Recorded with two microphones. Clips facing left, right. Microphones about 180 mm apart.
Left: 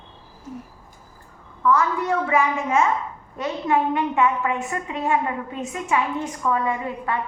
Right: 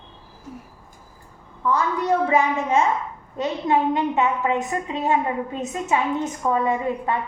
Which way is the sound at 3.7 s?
20° right (ahead or behind).